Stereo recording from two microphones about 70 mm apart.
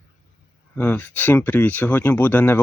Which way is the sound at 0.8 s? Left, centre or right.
Left.